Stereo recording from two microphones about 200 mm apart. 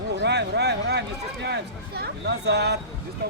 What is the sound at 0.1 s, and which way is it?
A man's voice, 55° right (ahead or behind).